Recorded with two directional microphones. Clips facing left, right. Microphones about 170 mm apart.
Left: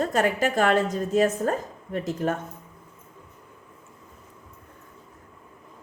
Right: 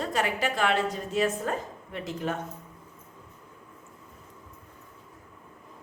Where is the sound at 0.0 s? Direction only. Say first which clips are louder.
Left 5 dB; 45° left (ahead or behind).